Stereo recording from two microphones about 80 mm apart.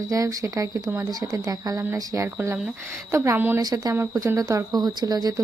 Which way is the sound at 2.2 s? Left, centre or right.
Right.